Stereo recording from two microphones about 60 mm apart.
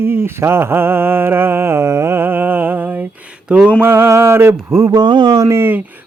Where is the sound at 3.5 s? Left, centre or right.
Right.